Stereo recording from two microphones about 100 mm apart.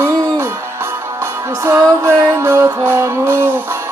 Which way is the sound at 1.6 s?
30° right (ahead or behind).